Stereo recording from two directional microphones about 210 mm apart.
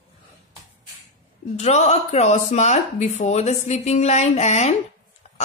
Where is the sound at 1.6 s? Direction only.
30° left (ahead or behind).